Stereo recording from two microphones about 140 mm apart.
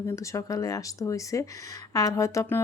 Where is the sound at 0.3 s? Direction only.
25° left (ahead or behind).